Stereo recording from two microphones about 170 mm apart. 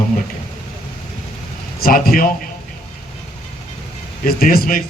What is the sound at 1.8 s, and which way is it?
Speech, 60° left (ahead or behind).